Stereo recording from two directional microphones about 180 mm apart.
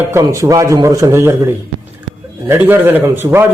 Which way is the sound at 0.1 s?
15° right (ahead or behind).